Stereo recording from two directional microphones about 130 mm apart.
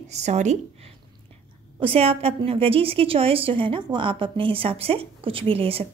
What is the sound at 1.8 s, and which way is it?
A woman's voice, 45° right (ahead or behind).